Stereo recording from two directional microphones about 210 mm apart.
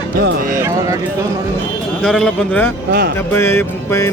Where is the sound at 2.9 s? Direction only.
50° right (ahead or behind).